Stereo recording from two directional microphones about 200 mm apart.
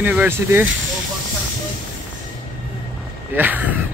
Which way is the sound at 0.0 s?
10° right (ahead or behind).